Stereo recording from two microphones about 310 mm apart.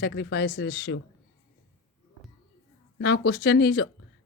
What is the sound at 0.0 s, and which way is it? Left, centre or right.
Speech, left.